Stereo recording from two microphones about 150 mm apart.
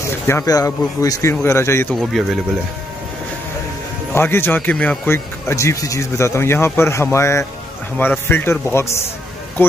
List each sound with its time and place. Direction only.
0.0 s speech: 20° left (ahead or behind)
4.1 s speech: 15° left (ahead or behind)